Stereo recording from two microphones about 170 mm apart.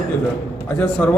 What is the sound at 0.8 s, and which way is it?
Speech, 5° left (ahead or behind).